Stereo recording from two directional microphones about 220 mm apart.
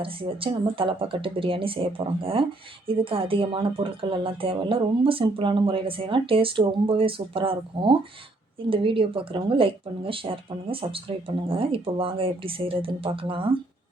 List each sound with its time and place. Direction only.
0.0 s speech: 25° right (ahead or behind)